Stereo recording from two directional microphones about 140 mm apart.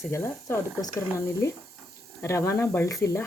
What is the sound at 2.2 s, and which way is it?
Speech, 20° left (ahead or behind).